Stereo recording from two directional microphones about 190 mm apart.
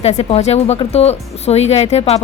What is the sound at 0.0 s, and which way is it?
A woman's voice, 35° left (ahead or behind).